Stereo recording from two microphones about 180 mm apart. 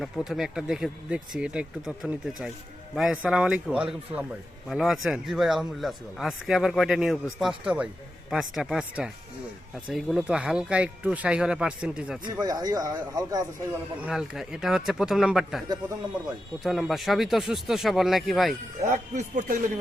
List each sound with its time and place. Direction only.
0.0 s speech: centre (ahead or behind)
12.2 s speech: 20° right (ahead or behind)
14.0 s speech: 5° right (ahead or behind)
16.6 s speech: centre (ahead or behind)
18.8 s speech: 40° right (ahead or behind)